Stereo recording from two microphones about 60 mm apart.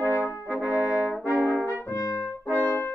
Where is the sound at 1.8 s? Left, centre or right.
Left.